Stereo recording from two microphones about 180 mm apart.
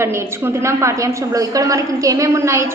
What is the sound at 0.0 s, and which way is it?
A woman's voice, 15° right (ahead or behind).